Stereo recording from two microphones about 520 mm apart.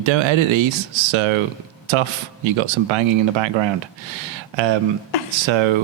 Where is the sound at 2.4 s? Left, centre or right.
Right.